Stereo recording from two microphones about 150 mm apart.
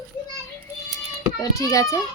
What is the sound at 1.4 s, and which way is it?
Speech, 25° left (ahead or behind).